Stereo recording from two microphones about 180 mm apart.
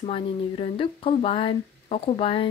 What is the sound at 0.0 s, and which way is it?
Speech, 30° left (ahead or behind).